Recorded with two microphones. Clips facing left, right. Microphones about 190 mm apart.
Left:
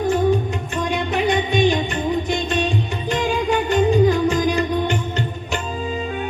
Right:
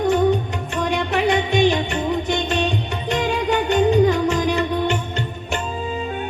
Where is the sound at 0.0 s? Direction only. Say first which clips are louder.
Right 1 dB; 70° right (ahead or behind).